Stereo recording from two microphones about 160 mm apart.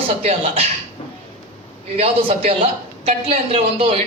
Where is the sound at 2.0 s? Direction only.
40° right (ahead or behind).